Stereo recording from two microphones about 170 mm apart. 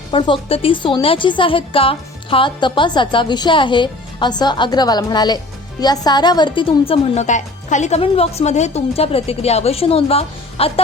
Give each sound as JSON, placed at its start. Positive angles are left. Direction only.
{"t": 0.1, "sound": "a woman's voice", "side_deg": 30}